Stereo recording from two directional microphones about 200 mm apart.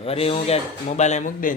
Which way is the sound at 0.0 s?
30° left (ahead or behind).